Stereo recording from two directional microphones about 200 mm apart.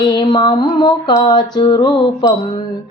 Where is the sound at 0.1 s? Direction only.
20° left (ahead or behind).